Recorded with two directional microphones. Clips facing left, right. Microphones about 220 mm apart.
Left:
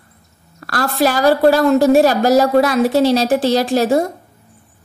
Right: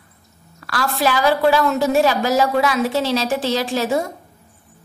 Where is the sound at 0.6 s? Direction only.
45° left (ahead or behind).